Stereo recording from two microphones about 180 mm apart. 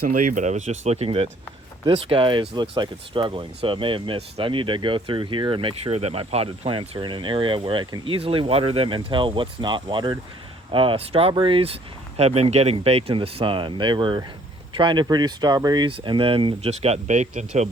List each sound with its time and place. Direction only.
0.0 s speech: 50° right (ahead or behind)